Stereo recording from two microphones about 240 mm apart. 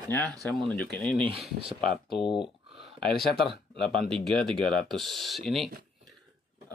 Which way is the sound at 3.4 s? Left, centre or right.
Centre.